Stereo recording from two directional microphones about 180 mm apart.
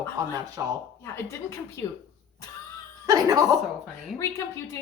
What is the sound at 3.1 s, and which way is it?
Speech, 20° right (ahead or behind).